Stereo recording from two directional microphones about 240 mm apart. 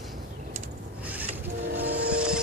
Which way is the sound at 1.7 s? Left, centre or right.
Right.